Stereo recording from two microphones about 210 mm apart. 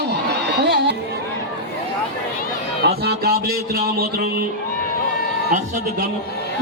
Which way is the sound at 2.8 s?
50° right (ahead or behind).